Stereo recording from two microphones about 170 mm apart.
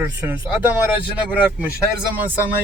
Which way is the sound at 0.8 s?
10° right (ahead or behind).